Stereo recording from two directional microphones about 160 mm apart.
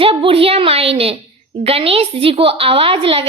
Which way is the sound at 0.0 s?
35° right (ahead or behind).